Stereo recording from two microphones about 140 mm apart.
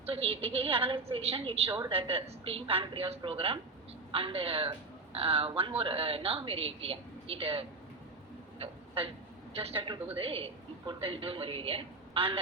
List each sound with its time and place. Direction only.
0.0 s a woman's voice: 45° right (ahead or behind)
8.5 s a sound: 40° right (ahead or behind)
9.5 s a woman's voice: 45° right (ahead or behind)